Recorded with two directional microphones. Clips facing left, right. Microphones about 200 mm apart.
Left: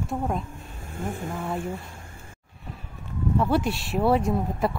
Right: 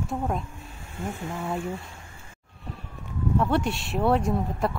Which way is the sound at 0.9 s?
50° left (ahead or behind).